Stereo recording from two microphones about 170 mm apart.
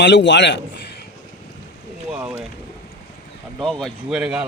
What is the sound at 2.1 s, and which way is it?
Boat, 5° right (ahead or behind).